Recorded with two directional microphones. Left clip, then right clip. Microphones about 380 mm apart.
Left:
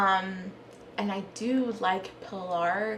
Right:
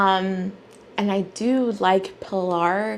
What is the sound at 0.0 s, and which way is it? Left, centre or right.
A woman's voice, right.